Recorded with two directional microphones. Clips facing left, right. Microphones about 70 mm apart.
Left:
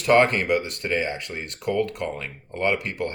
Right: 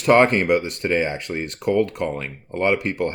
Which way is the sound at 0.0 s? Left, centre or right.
Right.